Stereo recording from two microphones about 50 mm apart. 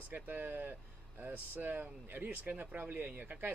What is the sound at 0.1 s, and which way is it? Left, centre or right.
Speech, right.